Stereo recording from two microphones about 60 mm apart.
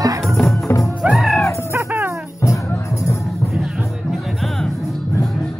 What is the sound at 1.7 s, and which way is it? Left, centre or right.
Music, right.